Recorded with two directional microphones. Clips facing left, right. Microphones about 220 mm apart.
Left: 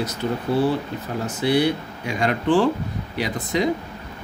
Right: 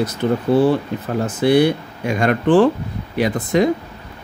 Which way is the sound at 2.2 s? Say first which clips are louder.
Right 5 dB; 55° right (ahead or behind).